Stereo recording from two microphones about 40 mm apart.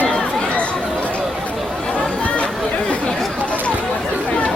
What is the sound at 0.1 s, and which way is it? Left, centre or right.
Chatter, left.